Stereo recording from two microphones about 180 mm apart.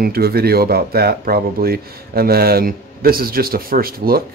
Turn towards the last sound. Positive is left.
turn(degrees=-55)  # may be behind; listen again after turning